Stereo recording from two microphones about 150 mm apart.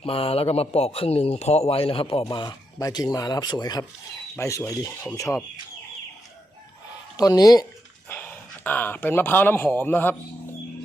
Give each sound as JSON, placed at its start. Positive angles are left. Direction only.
{"t": 0.0, "sound": "speech", "side_deg": 40}
{"t": 7.2, "sound": "speech", "side_deg": 25}
{"t": 8.1, "sound": "speech", "side_deg": 10}